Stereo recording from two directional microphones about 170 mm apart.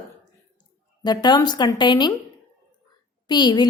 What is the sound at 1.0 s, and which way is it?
A woman's voice, 25° left (ahead or behind).